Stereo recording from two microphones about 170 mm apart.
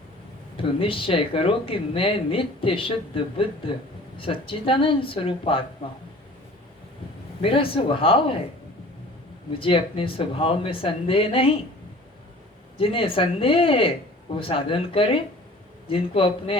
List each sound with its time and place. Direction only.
0.5 s a man's voice: 30° left (ahead or behind)
7.4 s speech: 30° left (ahead or behind)
9.6 s speech: 30° left (ahead or behind)
12.7 s speech: 30° left (ahead or behind)